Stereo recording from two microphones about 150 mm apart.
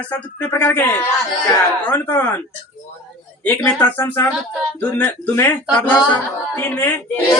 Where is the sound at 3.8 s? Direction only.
10° left (ahead or behind).